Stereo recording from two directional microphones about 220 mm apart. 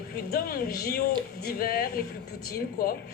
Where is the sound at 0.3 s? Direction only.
45° left (ahead or behind).